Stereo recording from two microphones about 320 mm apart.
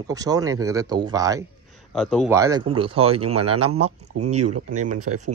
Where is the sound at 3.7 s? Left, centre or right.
Centre.